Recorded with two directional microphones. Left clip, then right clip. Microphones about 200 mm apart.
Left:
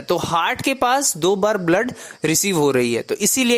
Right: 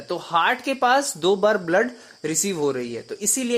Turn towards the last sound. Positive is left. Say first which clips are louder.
# left 6 dB
turn(degrees=40)  # may be behind; listen again after turning